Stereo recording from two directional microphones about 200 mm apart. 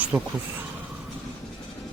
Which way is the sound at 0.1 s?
10° right (ahead or behind).